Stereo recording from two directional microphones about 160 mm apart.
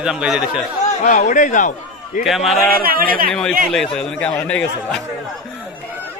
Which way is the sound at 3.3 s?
5° left (ahead or behind).